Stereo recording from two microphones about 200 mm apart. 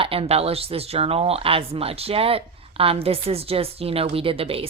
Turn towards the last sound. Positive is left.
turn(degrees=-30)  # may be behind; listen again after turning